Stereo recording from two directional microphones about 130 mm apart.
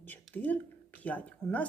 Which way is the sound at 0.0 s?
10° left (ahead or behind).